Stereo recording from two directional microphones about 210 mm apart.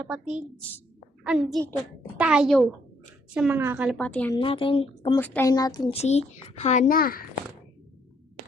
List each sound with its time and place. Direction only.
0.0 s a woman's voice: 5° right (ahead or behind)
3.9 s a woman's voice: 5° left (ahead or behind)
4.4 s speech: 25° left (ahead or behind)
5.1 s a woman's voice: 10° left (ahead or behind)
6.0 s a child's voice: 30° left (ahead or behind)